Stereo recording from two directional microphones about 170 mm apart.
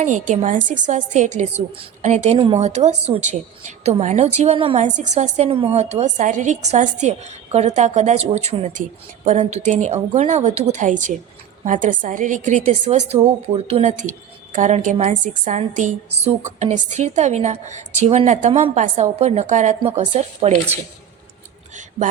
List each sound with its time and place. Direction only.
0.0 s a woman's voice: 50° right (ahead or behind)
4.8 s a woman's voice: 45° right (ahead or behind)